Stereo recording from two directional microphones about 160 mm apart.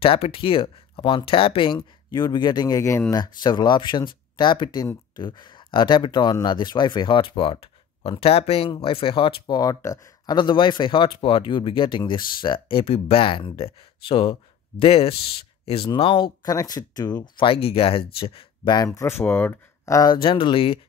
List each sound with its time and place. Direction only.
0.0 s speech: 35° left (ahead or behind)